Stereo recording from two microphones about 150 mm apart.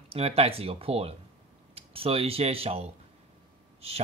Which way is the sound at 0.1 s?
40° right (ahead or behind).